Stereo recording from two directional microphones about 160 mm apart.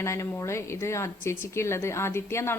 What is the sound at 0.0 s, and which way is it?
A woman's voice, 20° left (ahead or behind).